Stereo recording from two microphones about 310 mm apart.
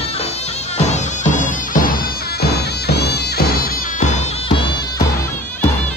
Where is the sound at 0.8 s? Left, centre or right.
Left.